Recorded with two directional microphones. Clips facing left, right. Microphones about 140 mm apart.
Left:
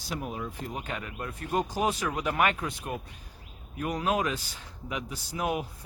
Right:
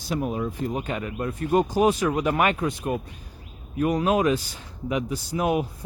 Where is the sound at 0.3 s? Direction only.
40° right (ahead or behind).